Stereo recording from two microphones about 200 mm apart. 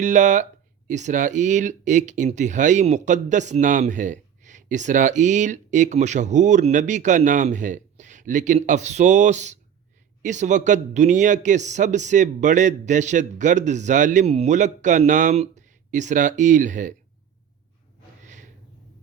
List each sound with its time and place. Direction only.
0.0 s speech: 35° right (ahead or behind)